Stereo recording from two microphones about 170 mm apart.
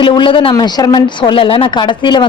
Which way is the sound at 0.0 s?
30° left (ahead or behind).